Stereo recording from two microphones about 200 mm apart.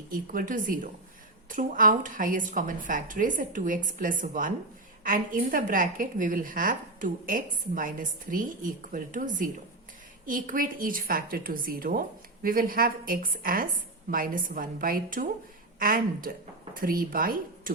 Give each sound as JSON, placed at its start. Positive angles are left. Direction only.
{"t": 0.1, "sound": "a woman's voice", "side_deg": -45}